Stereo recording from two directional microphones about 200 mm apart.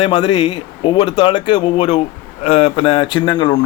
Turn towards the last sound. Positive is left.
turn(degrees=20)  # may be behind; listen again after turning